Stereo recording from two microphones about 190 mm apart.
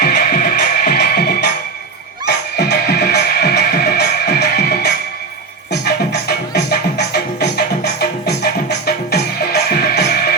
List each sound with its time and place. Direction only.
0.0 s music: 55° left (ahead or behind)